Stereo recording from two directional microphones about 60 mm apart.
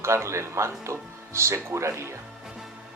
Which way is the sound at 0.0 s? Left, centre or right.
Right.